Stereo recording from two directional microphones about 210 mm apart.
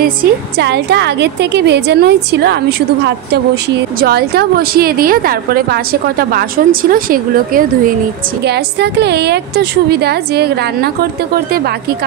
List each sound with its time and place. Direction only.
0.0 s a woman's voice: 50° right (ahead or behind)